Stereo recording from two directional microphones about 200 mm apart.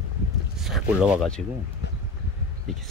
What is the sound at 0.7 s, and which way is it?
Speech, centre (ahead or behind).